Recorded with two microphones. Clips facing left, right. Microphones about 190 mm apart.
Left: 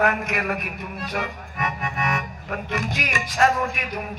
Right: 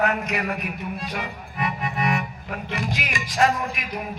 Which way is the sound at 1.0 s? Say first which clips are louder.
Left 6 dB; 45° left (ahead or behind).